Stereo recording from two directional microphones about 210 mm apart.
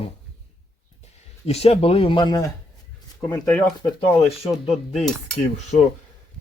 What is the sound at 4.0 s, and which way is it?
Speech, 25° left (ahead or behind).